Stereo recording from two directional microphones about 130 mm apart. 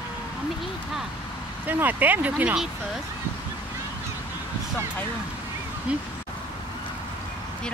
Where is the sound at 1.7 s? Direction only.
15° right (ahead or behind).